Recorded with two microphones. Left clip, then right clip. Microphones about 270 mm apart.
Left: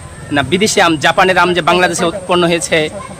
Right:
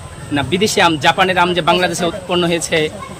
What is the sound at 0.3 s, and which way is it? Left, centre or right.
Speech, centre.